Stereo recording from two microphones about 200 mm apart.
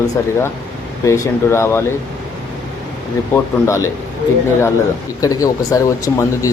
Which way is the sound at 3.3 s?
15° left (ahead or behind).